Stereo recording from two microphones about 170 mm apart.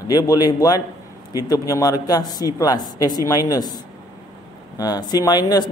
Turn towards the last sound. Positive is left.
turn(degrees=25)  # may be behind; listen again after turning